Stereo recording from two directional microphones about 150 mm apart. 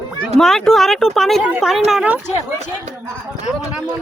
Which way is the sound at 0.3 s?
5° left (ahead or behind).